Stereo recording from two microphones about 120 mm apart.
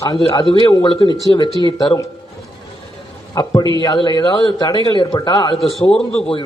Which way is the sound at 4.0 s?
40° left (ahead or behind).